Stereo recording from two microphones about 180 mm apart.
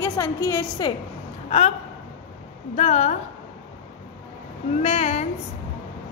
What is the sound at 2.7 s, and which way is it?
Speech, 40° left (ahead or behind).